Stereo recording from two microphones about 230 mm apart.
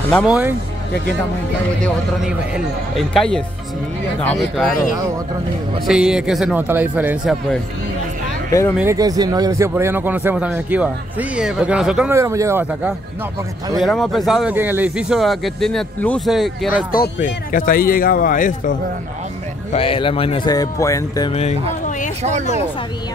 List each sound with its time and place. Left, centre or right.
0.1 s speech: centre
1.8 s speech: centre
5.9 s speech: centre
8.5 s speech: centre
8.7 s speech: centre
13.7 s speech: centre
16.7 s speech: left
19.7 s speech: left
21.3 s speech: left